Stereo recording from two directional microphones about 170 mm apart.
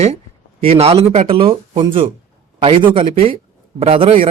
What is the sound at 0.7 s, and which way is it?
A man's voice, 35° right (ahead or behind).